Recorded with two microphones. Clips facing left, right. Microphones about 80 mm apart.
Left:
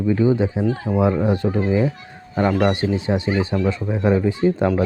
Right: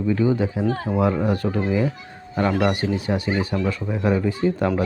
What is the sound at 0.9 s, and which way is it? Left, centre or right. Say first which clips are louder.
Speech: left 4 dB; centre.